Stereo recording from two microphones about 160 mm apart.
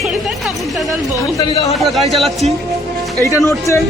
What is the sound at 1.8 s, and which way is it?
Speech, centre (ahead or behind).